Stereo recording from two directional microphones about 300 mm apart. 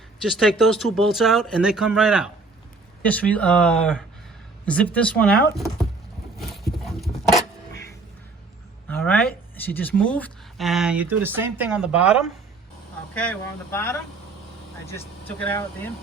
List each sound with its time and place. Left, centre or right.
0.2 s speech: centre
6.3 s a sound: centre
9.0 s speech: centre
13.1 s speech: centre
15.4 s speech: centre